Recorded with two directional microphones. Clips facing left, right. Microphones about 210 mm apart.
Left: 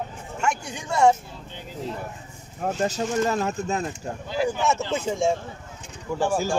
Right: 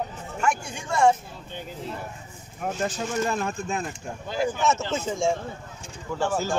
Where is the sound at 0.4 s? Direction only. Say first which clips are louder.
Even; 20° left (ahead or behind).